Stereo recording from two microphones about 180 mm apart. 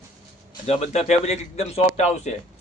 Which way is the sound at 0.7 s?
35° left (ahead or behind).